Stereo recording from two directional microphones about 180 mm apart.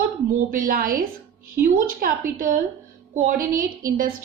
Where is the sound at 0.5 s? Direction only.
50° right (ahead or behind).